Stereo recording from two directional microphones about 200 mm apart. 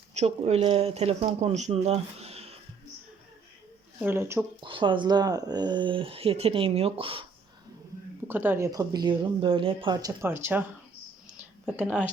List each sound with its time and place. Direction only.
0.1 s speech: 35° right (ahead or behind)
4.0 s speech: 10° right (ahead or behind)
4.6 s speech: 25° right (ahead or behind)
8.3 s speech: 10° right (ahead or behind)
11.3 s a sound: 5° right (ahead or behind)